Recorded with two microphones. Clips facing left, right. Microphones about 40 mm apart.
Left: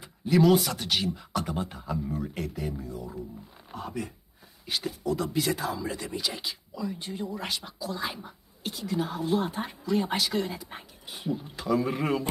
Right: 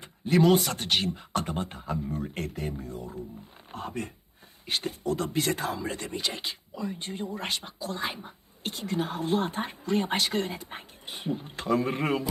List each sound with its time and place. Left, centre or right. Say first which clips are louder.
0.0 s a sound: even; right
1.0 s speech: even; right
8.6 s speech: even; right